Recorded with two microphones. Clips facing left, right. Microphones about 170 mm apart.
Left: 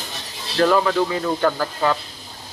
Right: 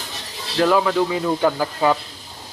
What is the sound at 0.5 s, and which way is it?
Speech, 5° right (ahead or behind).